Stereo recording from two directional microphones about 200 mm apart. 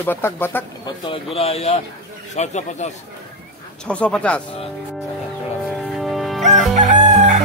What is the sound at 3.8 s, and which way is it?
Speech, 5° left (ahead or behind).